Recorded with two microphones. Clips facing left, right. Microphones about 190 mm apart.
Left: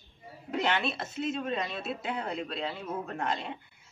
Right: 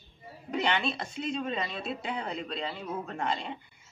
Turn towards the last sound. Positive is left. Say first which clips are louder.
# even
turn(degrees=0)  # may be behind; listen again after turning